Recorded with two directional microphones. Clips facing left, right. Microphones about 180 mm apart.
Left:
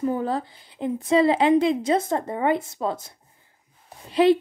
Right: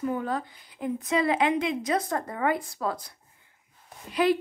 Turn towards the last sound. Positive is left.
turn(degrees=25)  # may be behind; listen again after turning